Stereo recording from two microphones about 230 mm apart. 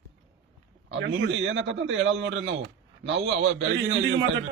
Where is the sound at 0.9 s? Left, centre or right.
Right.